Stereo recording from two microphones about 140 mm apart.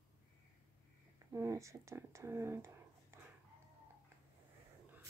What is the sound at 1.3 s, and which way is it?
Speech, 20° right (ahead or behind).